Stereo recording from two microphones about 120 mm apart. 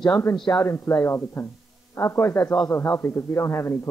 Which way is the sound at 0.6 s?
20° left (ahead or behind).